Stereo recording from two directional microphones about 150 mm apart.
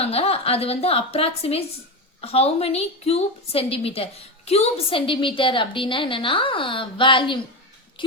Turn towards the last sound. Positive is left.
turn(degrees=35)  # may be behind; listen again after turning